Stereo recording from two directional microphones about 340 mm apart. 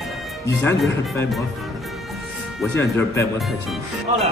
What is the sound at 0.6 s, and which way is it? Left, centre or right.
Speech, centre.